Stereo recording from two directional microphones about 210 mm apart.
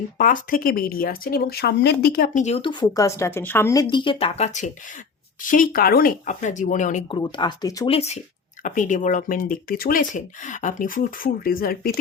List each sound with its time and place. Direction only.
0.2 s speech: 40° left (ahead or behind)
7.1 s speech: 20° left (ahead or behind)
7.9 s speech: 30° left (ahead or behind)